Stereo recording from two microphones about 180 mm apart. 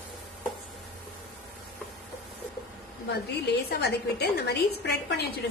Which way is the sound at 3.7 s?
65° left (ahead or behind).